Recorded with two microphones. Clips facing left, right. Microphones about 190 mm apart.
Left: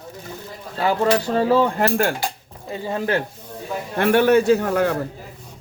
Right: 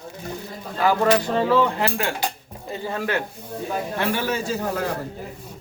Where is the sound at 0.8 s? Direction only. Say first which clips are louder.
Even; 25° left (ahead or behind).